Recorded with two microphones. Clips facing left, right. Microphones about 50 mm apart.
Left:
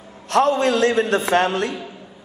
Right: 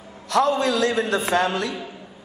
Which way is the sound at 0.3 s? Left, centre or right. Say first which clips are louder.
Left 3 dB; left.